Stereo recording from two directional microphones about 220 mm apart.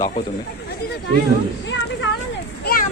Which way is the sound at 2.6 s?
40° left (ahead or behind).